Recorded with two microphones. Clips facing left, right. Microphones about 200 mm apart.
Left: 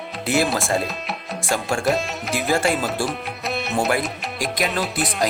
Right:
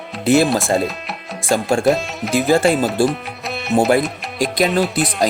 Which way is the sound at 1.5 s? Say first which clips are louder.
Right 7 dB; 30° right (ahead or behind).